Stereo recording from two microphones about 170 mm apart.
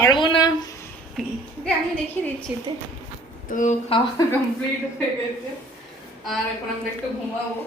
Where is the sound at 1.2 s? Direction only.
5° left (ahead or behind).